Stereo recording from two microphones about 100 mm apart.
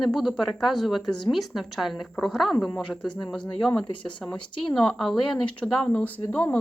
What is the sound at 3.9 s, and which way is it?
Speech, 55° left (ahead or behind).